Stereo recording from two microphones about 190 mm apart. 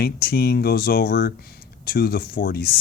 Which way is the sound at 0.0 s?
55° left (ahead or behind).